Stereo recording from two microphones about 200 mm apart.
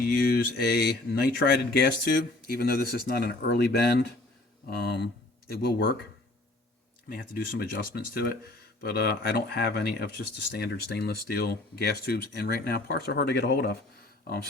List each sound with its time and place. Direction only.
0.0 s speech: 50° left (ahead or behind)
7.1 s speech: 50° left (ahead or behind)